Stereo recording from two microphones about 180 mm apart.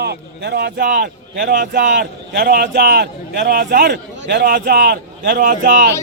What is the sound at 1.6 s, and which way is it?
Speech, 80° right.